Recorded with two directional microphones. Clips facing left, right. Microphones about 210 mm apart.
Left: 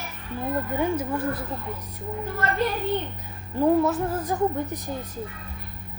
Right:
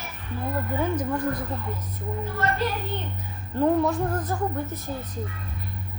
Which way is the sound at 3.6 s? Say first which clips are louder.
Left 1 dB; 5° left (ahead or behind).